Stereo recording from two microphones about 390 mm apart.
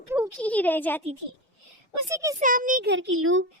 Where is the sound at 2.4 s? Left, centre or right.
Right.